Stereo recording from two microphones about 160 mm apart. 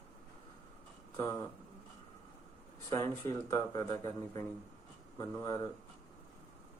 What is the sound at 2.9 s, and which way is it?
Speech, 20° left (ahead or behind).